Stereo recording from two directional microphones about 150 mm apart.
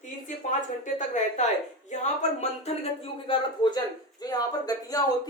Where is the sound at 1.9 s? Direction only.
50° left (ahead or behind).